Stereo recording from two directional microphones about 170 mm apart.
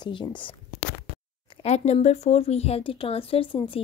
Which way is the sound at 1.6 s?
40° left (ahead or behind).